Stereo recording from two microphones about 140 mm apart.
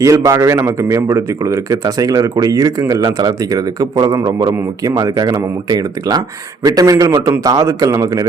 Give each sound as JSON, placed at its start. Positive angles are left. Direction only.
{"t": 0.0, "sound": "a man's voice", "side_deg": -25}